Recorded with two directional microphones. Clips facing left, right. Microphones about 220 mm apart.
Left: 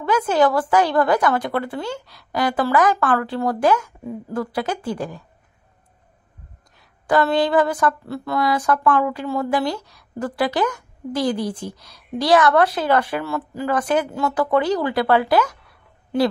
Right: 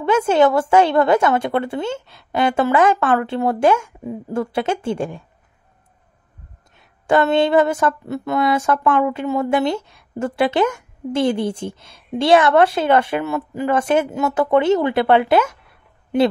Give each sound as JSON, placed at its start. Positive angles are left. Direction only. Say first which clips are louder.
{"t": 0.0, "sound": "speech", "louder": "right 3 dB", "side_deg": -25}
{"t": 6.7, "sound": "speech", "louder": "right 2 dB", "side_deg": -25}